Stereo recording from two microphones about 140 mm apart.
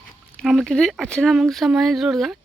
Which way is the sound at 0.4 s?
Centre (ahead or behind).